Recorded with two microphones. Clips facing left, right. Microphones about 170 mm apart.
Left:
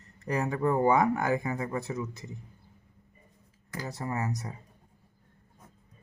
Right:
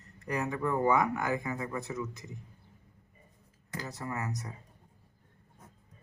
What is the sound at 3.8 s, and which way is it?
Speech, 30° left (ahead or behind).